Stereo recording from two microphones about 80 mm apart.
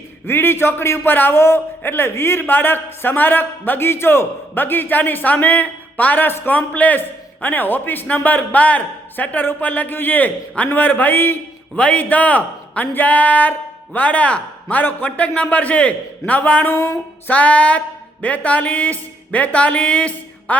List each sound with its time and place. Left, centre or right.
0.3 s a man's voice: left
16.7 s a sound: left
17.2 s speech: centre